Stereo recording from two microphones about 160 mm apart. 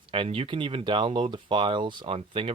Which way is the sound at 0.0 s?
35° right (ahead or behind).